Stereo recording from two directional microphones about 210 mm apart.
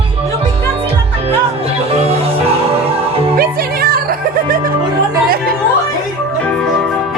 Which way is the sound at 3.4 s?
45° right (ahead or behind).